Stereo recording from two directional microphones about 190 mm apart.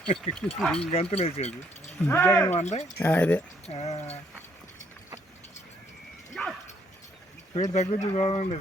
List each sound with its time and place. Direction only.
0.3 s speech: 35° left (ahead or behind)
0.6 s speech: 5° left (ahead or behind)
0.9 s speech: 35° left (ahead or behind)
2.0 s speech: 10° left (ahead or behind)
2.6 s speech: 35° left (ahead or behind)
3.0 s speech: 10° left (ahead or behind)
3.7 s speech: 35° left (ahead or behind)
6.4 s dog: 5° left (ahead or behind)
7.5 s speech: 35° left (ahead or behind)